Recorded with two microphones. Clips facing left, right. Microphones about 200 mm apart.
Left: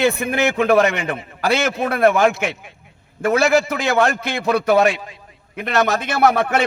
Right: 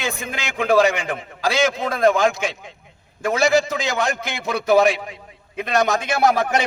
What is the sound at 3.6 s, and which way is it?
Speech, 20° right (ahead or behind).